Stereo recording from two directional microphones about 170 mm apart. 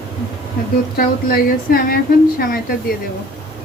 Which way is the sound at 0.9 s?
60° left (ahead or behind).